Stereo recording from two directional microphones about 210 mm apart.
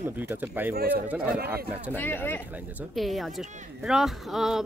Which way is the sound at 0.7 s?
45° right (ahead or behind).